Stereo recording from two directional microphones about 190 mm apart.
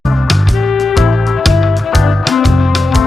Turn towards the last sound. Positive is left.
turn(degrees=0)  # may be behind; listen again after turning